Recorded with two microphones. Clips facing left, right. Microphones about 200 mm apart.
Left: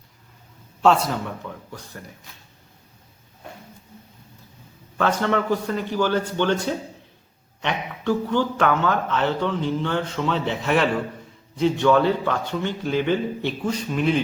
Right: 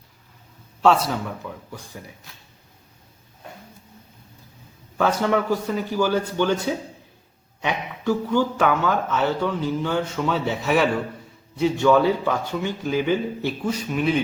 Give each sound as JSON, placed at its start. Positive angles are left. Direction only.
{"t": 0.8, "sound": "speech", "side_deg": 0}
{"t": 4.9, "sound": "speech", "side_deg": -10}